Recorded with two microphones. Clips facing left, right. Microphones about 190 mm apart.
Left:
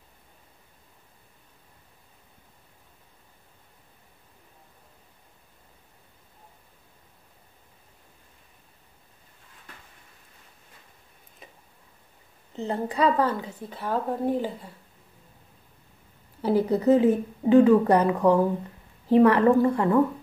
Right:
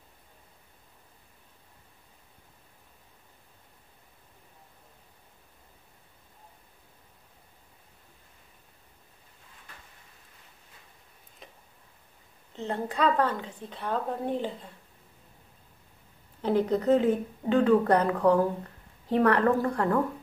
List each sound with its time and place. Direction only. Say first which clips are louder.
12.5 s speech: left 3 dB; 10° left (ahead or behind)
16.3 s speech: left 2 dB; 5° left (ahead or behind)